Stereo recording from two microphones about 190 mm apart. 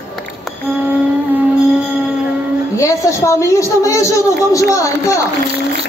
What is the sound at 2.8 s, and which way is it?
A woman's voice, 15° left (ahead or behind).